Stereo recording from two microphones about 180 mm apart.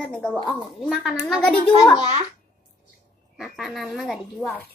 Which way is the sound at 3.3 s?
Centre (ahead or behind).